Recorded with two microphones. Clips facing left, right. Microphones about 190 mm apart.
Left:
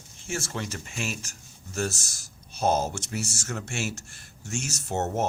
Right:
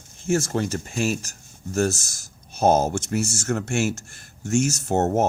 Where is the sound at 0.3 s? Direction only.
40° right (ahead or behind).